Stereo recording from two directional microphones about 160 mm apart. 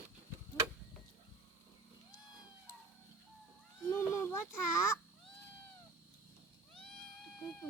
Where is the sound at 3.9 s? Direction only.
15° left (ahead or behind).